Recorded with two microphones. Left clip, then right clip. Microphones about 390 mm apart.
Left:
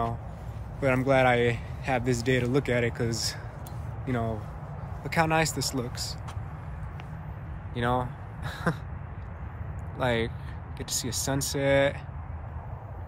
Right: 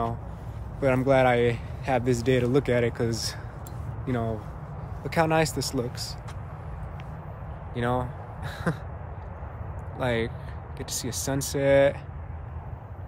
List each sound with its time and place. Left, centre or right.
0.7 s speech: centre
7.7 s speech: centre
9.9 s speech: centre